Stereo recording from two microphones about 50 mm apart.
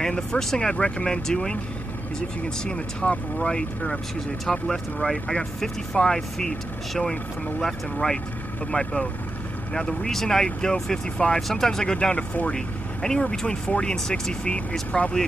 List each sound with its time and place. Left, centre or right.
0.3 s speech: centre
0.6 s speech: left
8.7 s speech: left
9.8 s speech: centre